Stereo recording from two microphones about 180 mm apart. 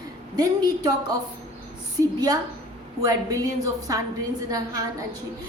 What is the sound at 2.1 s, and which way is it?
A woman's voice, 20° right (ahead or behind).